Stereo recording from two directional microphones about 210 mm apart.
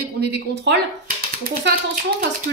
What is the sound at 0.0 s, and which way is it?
Speech, 55° right (ahead or behind).